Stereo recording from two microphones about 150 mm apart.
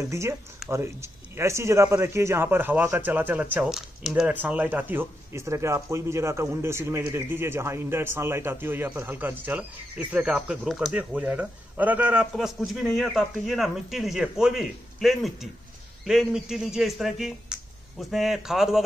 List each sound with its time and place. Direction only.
0.1 s a man's voice: 20° right (ahead or behind); by 18.8 s centre (ahead or behind)